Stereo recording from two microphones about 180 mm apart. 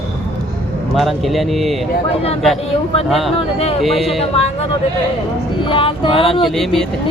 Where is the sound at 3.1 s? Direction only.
Centre (ahead or behind).